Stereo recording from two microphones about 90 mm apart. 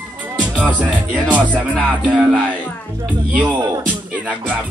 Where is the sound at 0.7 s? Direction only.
15° right (ahead or behind).